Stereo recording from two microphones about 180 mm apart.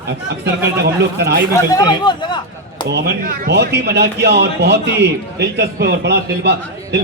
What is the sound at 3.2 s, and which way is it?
A man's voice, 60° right (ahead or behind).